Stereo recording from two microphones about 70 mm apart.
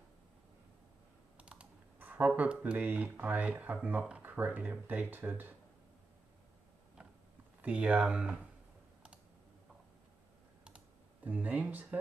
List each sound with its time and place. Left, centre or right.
1.4 s computer keyboard: centre
2.0 s speech: right
7.6 s speech: centre
11.2 s speech: right